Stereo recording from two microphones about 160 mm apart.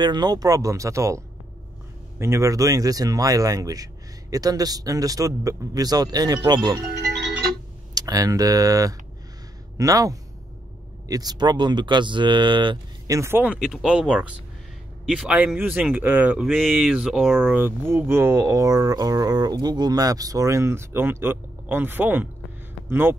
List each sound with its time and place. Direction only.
0.0 s speech: 25° right (ahead or behind)
7.9 s speech: 25° right (ahead or behind)
16.4 s speech: centre (ahead or behind)
17.5 s speech: 10° right (ahead or behind)